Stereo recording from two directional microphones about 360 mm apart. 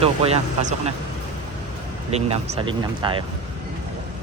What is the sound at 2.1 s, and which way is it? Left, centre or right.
Speech, centre.